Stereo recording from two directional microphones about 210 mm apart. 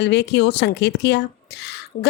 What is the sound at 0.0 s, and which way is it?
A woman's voice, 55° left (ahead or behind).